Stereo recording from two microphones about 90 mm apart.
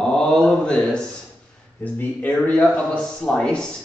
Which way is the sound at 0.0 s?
5° left (ahead or behind).